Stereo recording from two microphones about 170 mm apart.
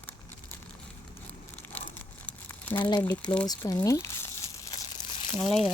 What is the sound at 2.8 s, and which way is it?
Speech, 25° left (ahead or behind).